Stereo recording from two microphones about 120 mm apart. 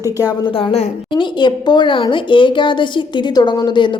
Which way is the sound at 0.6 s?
45° left (ahead or behind).